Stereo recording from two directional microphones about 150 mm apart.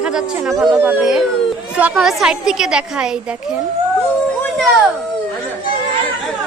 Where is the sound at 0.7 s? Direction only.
20° right (ahead or behind).